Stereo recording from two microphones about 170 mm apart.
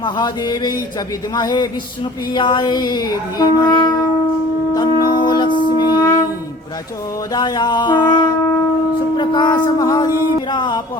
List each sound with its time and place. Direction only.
0.0 s child singing: 25° left (ahead or behind)
4.7 s a sound: 25° left (ahead or behind)
5.5 s music: 25° right (ahead or behind)
5.8 s music: 25° left (ahead or behind)
7.3 s child singing: 25° left (ahead or behind)